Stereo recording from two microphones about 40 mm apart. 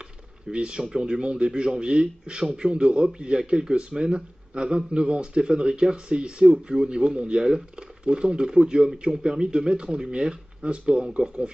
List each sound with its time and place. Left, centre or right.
0.5 s speech: right